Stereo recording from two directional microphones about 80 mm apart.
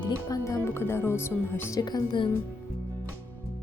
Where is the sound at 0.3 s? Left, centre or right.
Left.